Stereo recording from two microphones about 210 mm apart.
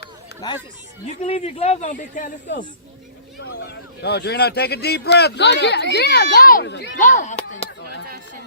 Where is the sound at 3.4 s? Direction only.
50° left (ahead or behind).